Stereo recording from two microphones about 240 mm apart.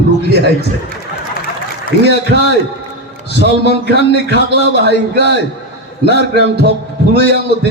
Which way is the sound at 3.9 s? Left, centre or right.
Right.